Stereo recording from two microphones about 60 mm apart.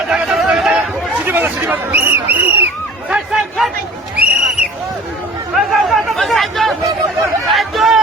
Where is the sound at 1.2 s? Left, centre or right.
Right.